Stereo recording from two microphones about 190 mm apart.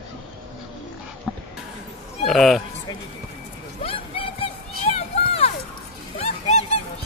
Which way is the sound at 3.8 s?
30° left (ahead or behind).